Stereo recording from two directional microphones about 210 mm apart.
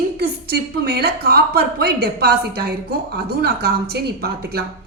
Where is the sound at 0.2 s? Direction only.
50° right (ahead or behind).